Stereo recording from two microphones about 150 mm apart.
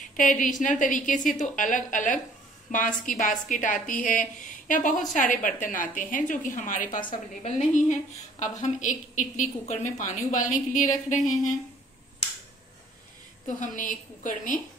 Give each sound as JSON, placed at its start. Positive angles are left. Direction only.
{"t": 0.1, "sound": "a woman's voice", "side_deg": 60}
{"t": 7.1, "sound": "a woman's voice", "side_deg": 45}
{"t": 13.6, "sound": "a woman's voice", "side_deg": 60}